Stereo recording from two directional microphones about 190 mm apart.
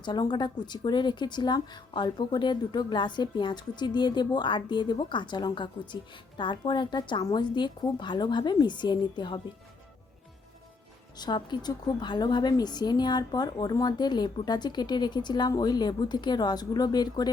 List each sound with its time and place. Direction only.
0.0 s speech: 20° left (ahead or behind)
11.2 s speech: 25° left (ahead or behind)